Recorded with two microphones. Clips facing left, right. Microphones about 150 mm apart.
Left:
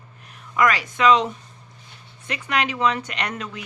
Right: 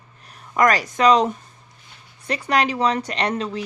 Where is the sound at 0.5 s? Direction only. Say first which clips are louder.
Right 2 dB; 40° right (ahead or behind).